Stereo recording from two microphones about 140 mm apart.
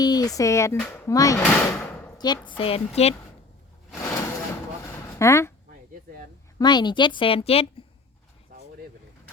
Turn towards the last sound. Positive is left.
turn(degrees=45)  # may be behind; listen again after turning